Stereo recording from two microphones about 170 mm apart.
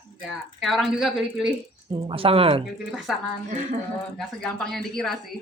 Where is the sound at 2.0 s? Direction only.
35° right (ahead or behind).